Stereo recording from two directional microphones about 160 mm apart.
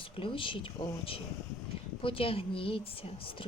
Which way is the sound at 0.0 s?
35° left (ahead or behind).